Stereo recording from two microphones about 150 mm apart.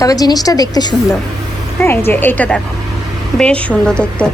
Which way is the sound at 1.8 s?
15° left (ahead or behind).